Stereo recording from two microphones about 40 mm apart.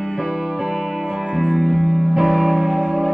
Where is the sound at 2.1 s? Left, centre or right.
Centre.